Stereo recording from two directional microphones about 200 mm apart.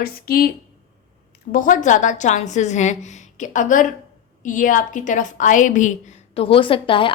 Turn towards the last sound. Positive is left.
turn(degrees=25)  # may be behind; listen again after turning